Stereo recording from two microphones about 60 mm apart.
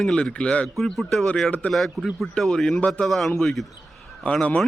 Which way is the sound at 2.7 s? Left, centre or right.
Left.